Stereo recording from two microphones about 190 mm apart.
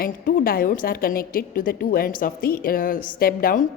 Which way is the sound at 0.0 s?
50° left (ahead or behind).